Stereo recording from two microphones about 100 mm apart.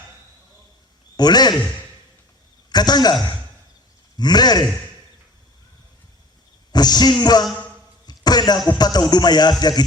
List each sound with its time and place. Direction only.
1.1 s a man's voice: 45° left (ahead or behind)
2.6 s a man's voice: 45° left (ahead or behind)
6.7 s a man's voice: 45° left (ahead or behind)
8.0 s basketball bounce: 45° left (ahead or behind)
8.8 s a man's voice: 45° left (ahead or behind)